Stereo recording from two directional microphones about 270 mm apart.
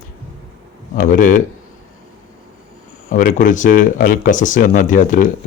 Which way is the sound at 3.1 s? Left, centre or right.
Left.